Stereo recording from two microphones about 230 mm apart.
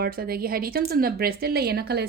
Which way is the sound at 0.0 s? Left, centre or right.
Right.